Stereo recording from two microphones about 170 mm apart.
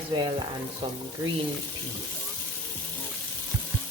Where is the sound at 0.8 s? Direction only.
25° right (ahead or behind).